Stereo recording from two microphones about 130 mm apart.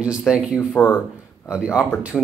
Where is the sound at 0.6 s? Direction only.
20° left (ahead or behind).